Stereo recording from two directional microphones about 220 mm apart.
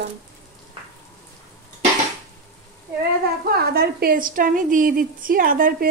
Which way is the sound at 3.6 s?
45° right (ahead or behind).